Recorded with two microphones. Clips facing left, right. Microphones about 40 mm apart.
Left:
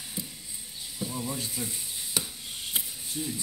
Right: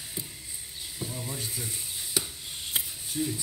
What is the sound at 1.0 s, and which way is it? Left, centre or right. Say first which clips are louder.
Speech: left 4 dB; centre.